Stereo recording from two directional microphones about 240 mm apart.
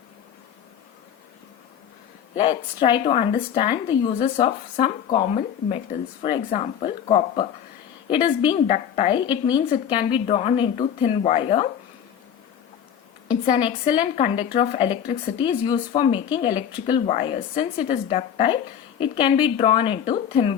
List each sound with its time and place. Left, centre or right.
2.3 s speech: left
13.6 s speech: centre